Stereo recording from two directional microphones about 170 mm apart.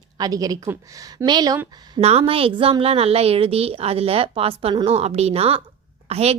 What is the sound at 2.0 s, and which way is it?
A woman's voice, 35° right (ahead or behind).